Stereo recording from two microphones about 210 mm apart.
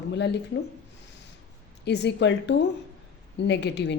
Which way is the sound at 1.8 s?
55° left (ahead or behind).